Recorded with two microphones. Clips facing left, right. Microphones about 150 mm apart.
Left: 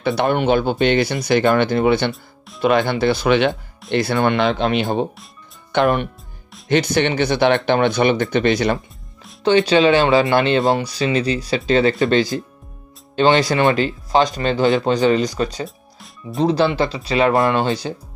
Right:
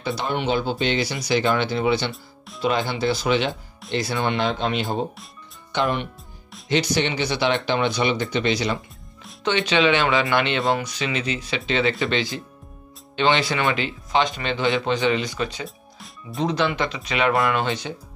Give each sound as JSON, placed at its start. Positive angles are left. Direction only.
{"t": 0.0, "sound": "speech", "side_deg": 60}
{"t": 5.7, "sound": "speech", "side_deg": 55}
{"t": 9.4, "sound": "speech", "side_deg": 35}
{"t": 15.6, "sound": "music", "side_deg": 0}
{"t": 16.3, "sound": "speech", "side_deg": 35}